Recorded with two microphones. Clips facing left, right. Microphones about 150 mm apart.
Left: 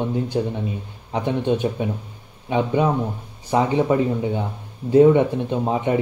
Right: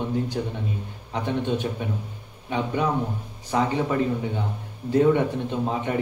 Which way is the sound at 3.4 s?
20° left (ahead or behind).